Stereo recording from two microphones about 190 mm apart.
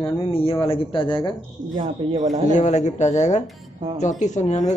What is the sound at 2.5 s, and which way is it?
Speech, 40° left (ahead or behind).